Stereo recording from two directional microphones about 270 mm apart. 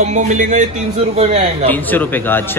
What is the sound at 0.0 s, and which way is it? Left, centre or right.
Speech, right.